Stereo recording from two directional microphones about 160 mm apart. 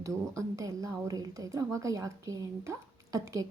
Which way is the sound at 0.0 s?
20° right (ahead or behind).